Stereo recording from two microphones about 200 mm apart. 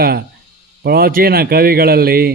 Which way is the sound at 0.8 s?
50° right (ahead or behind).